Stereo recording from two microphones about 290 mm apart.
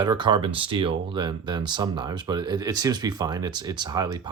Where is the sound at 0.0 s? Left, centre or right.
Centre.